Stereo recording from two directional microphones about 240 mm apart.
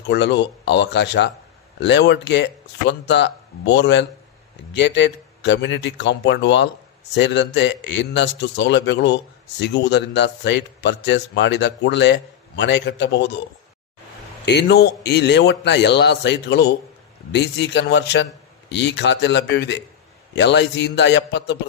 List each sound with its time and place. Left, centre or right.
0.1 s a man's voice: left
14.4 s a man's voice: left